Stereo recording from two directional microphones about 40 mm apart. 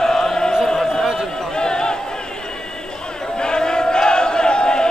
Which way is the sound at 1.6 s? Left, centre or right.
Centre.